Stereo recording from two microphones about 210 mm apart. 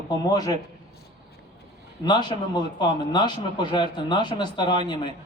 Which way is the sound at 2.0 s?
20° left (ahead or behind).